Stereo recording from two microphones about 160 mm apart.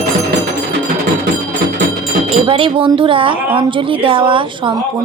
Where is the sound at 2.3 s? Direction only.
35° right (ahead or behind).